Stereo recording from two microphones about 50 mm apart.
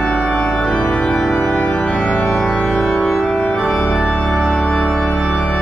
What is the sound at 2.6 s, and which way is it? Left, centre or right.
Music, centre.